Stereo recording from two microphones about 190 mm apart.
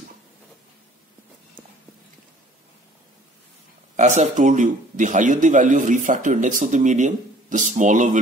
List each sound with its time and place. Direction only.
3.9 s speech: 40° right (ahead or behind)